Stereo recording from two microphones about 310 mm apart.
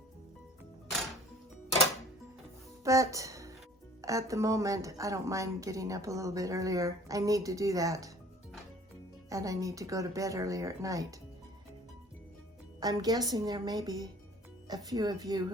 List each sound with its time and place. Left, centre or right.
2.8 s speech: centre
9.3 s speech: centre
12.8 s speech: centre